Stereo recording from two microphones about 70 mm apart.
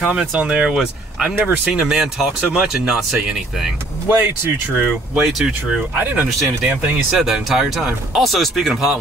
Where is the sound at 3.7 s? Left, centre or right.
Right.